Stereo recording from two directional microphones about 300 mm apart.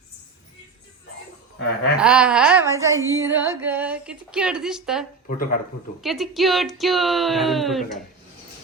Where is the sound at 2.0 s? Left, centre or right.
Centre.